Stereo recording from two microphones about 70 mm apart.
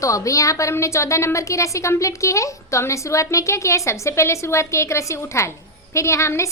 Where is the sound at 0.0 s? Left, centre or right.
Left.